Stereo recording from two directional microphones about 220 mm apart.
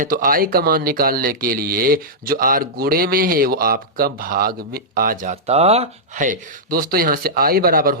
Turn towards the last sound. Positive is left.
turn(degrees=-40)  # may be behind; listen again after turning